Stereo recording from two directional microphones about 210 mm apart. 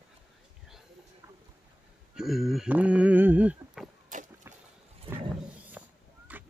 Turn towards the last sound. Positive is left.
turn(degrees=-5)  # may be behind; listen again after turning